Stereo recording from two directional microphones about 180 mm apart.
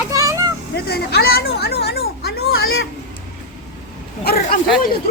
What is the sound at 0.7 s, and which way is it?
Speech, 60° left (ahead or behind).